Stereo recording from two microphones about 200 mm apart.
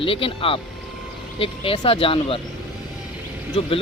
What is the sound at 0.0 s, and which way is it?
Speech, 25° left (ahead or behind).